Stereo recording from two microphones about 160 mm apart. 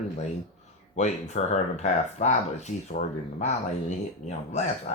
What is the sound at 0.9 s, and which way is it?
Speech, 50° left (ahead or behind).